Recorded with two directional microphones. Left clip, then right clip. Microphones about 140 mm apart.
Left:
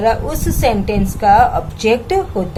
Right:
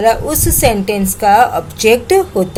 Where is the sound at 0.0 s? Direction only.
40° right (ahead or behind).